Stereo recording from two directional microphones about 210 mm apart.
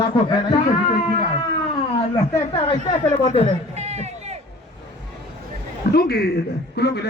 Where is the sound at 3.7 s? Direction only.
30° right (ahead or behind).